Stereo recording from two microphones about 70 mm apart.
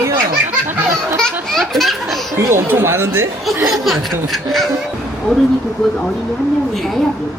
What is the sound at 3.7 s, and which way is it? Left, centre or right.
Speech, centre.